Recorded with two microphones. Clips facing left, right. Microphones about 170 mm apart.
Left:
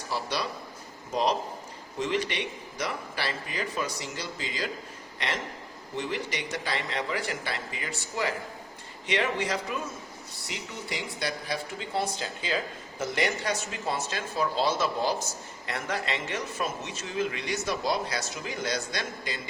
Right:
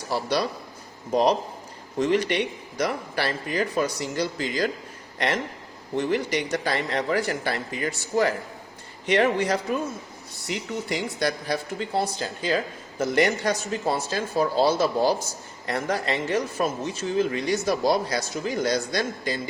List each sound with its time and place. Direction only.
0.1 s speech: 40° right (ahead or behind)
2.0 s a man's voice: 45° right (ahead or behind)
10.8 s speech: 45° right (ahead or behind)